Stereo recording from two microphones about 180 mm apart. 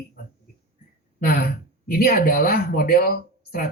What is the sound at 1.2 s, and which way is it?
Speech, 60° left (ahead or behind).